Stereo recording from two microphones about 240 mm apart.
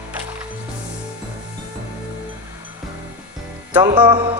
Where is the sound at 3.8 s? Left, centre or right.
Right.